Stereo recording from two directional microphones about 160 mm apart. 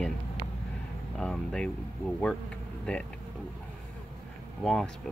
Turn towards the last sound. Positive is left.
turn(degrees=0)  # may be behind; listen again after turning